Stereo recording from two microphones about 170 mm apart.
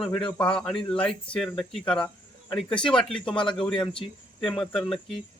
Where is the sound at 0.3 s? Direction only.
30° left (ahead or behind).